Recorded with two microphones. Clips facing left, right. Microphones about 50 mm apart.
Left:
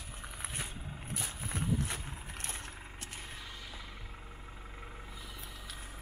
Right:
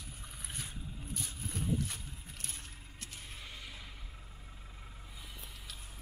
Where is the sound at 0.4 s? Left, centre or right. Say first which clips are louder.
Left 3 dB; left.